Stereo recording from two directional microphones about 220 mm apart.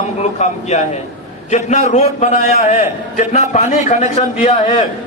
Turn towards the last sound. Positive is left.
turn(degrees=30)  # may be behind; listen again after turning